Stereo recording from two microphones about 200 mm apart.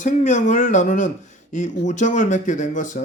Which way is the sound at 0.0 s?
40° left (ahead or behind).